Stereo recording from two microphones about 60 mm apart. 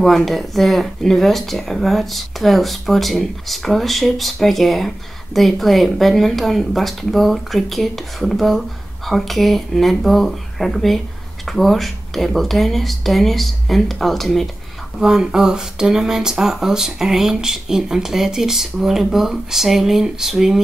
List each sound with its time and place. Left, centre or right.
0.0 s speech: centre
15.0 s speech: centre